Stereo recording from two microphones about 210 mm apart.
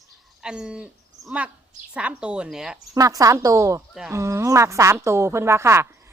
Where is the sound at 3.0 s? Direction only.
15° right (ahead or behind).